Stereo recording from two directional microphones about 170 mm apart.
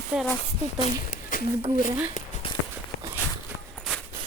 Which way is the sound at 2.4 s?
30° left (ahead or behind).